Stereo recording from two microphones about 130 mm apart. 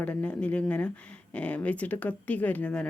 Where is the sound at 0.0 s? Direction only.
10° left (ahead or behind).